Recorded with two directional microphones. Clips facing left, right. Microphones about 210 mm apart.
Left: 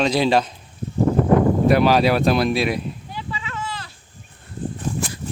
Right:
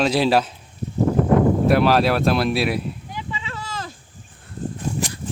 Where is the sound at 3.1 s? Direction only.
20° right (ahead or behind).